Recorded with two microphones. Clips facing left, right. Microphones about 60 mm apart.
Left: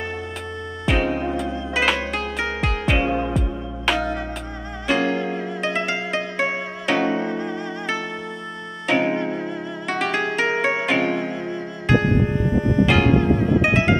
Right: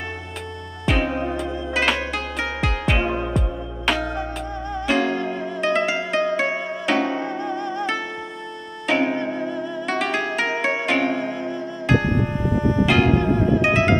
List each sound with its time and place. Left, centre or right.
1.0 s music: centre
5.0 s music: centre
5.6 s music: centre
8.8 s harp: centre
9.1 s music: centre
9.8 s music: centre
11.0 s music: centre
11.9 s music: centre